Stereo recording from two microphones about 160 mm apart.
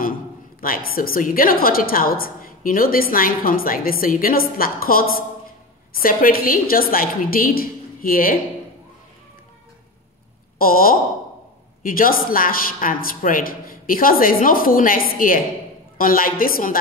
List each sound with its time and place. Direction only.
0.6 s a woman's voice: 65° left (ahead or behind)
10.6 s a woman's voice: 65° left (ahead or behind)